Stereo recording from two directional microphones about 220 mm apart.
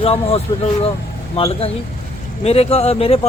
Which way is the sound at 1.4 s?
25° left (ahead or behind).